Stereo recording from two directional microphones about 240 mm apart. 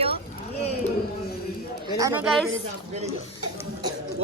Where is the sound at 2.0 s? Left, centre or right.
Centre.